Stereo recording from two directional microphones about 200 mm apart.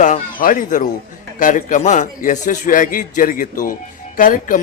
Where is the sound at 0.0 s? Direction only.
40° left (ahead or behind).